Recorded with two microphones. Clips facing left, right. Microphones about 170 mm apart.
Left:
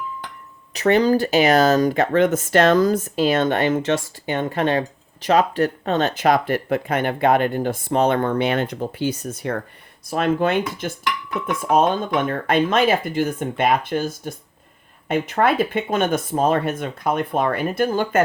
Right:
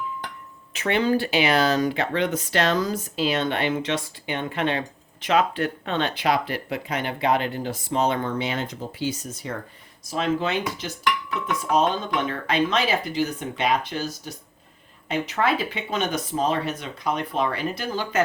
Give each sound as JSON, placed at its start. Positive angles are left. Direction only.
{"t": 0.7, "sound": "speech", "side_deg": 40}